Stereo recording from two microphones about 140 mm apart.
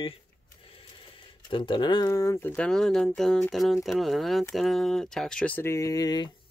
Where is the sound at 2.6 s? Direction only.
5° left (ahead or behind).